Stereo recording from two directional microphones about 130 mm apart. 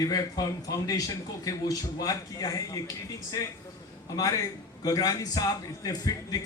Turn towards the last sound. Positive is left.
turn(degrees=30)  # may be behind; listen again after turning